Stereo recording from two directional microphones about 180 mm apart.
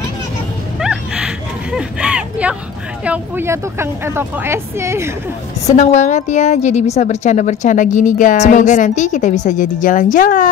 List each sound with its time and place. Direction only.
0.7 s a sound: 5° right (ahead or behind)
3.1 s speech: 15° right (ahead or behind)
5.8 s a woman's voice: 40° left (ahead or behind)